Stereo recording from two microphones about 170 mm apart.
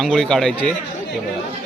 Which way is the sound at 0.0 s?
Centre (ahead or behind).